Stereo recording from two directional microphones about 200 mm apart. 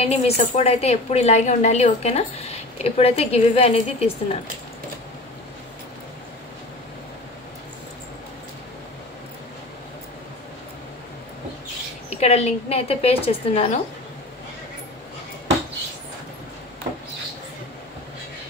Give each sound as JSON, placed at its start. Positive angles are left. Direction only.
{"t": 0.0, "sound": "a woman's voice", "side_deg": 30}
{"t": 12.1, "sound": "a woman's voice", "side_deg": 30}